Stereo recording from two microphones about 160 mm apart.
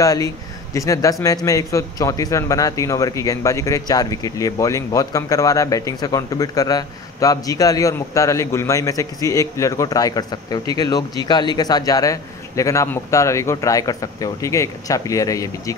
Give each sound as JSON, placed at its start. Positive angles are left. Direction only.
{"t": 0.0, "sound": "a man's voice", "side_deg": 20}